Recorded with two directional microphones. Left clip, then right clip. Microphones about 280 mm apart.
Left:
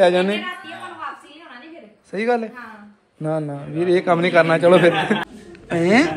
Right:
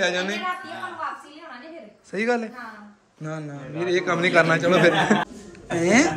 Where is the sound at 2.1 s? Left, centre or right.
Centre.